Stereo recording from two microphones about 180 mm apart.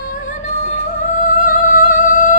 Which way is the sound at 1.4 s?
45° left (ahead or behind).